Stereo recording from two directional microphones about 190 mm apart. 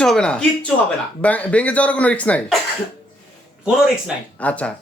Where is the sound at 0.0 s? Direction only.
5° left (ahead or behind).